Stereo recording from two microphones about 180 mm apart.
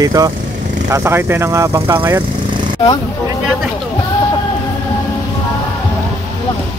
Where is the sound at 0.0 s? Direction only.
20° right (ahead or behind).